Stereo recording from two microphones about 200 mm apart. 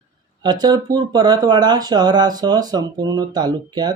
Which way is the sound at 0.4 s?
20° right (ahead or behind).